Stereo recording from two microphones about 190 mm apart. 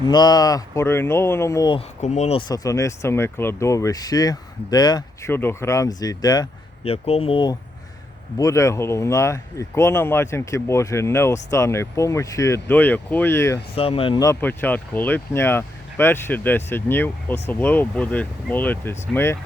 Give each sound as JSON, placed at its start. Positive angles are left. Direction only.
{"t": 0.0, "sound": "speech", "side_deg": 20}
{"t": 2.0, "sound": "speech", "side_deg": 35}
{"t": 2.5, "sound": "speech", "side_deg": 15}
{"t": 6.8, "sound": "speech", "side_deg": 35}
{"t": 8.4, "sound": "speech", "side_deg": 15}
{"t": 13.7, "sound": "speech", "side_deg": 30}
{"t": 14.3, "sound": "speech", "side_deg": 10}